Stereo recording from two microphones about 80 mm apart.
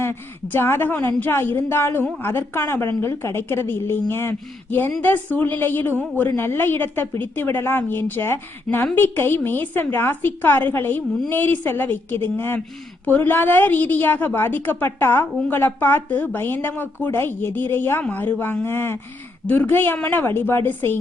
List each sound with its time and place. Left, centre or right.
0.0 s a woman's voice: left